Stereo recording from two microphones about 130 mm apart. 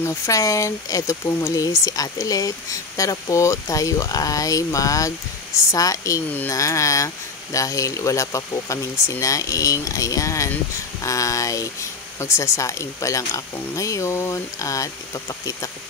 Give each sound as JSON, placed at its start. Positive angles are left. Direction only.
{"t": 0.0, "sound": "speech", "side_deg": 25}